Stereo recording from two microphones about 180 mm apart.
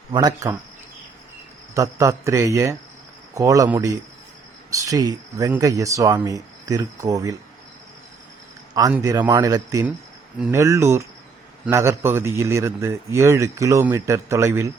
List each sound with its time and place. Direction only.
0.1 s speech: 20° right (ahead or behind)
1.7 s a man's voice: 15° right (ahead or behind)
9.0 s a man's voice: 20° right (ahead or behind)